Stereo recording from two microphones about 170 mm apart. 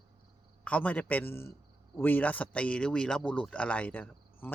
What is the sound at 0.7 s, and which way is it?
Speech, 10° left (ahead or behind).